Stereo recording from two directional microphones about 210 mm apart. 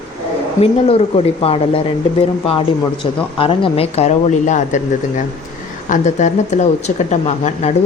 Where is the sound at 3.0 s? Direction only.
25° left (ahead or behind).